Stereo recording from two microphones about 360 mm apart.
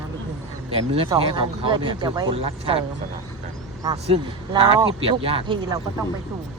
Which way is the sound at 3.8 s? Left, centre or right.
Centre.